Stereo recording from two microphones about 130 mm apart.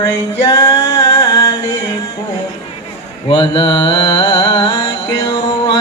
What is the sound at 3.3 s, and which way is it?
Mantra, 40° left (ahead or behind).